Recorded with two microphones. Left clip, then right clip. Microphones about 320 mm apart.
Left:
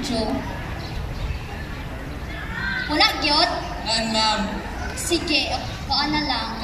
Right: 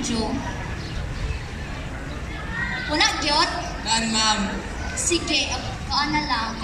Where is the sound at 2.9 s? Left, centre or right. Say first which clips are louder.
Left 2 dB; centre.